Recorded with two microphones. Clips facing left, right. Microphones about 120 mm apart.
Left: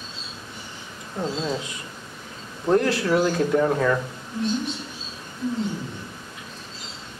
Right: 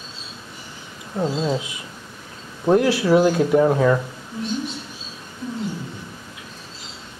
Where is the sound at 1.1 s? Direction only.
10° right (ahead or behind).